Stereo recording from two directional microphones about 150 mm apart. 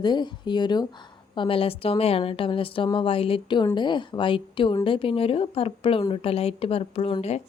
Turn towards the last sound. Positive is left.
turn(degrees=45)  # may be behind; listen again after turning